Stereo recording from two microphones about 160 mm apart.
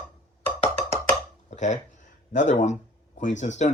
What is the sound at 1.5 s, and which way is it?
Speech, 50° left (ahead or behind).